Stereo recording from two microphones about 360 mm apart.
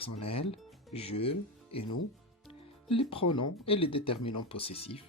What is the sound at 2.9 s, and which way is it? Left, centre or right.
Speech, centre.